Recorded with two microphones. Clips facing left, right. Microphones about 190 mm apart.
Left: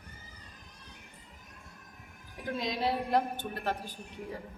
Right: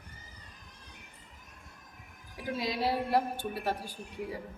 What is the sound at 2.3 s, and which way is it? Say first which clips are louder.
A woman's voice: right 1 dB; 5° right (ahead or behind).